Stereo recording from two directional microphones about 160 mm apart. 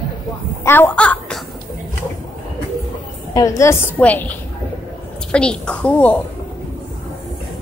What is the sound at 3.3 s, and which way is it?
A woman's voice, 20° left (ahead or behind).